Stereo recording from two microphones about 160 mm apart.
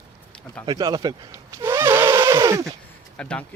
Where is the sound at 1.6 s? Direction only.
15° right (ahead or behind).